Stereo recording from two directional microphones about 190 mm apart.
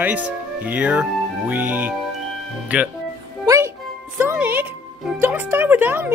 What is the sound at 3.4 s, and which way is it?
Music, 15° right (ahead or behind).